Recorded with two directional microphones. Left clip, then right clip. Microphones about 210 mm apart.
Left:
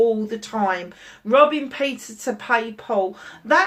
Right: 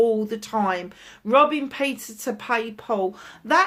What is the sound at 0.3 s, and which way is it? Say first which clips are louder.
Speech: left 1 dB; 50° right (ahead or behind).